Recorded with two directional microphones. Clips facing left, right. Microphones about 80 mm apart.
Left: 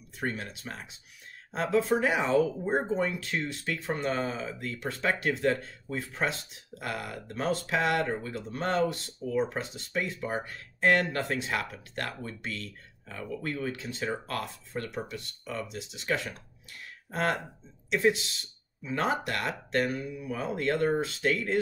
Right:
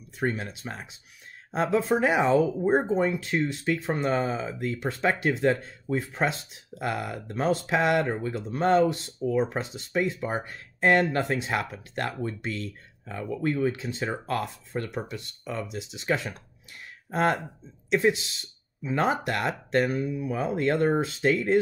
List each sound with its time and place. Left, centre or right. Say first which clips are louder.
0.4 s speech: right 3 dB; right
18.9 s speech: right 4 dB; right